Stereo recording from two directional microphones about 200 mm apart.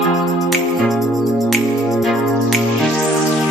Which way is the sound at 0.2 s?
Centre (ahead or behind).